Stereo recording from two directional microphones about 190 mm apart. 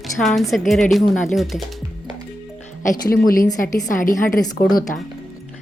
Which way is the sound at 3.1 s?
50° left (ahead or behind).